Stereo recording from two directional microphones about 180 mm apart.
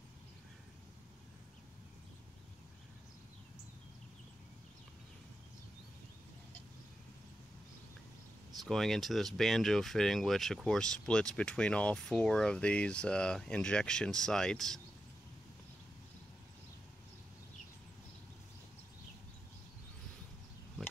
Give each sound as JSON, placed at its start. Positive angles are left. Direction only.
{"t": 8.5, "sound": "speech", "side_deg": 0}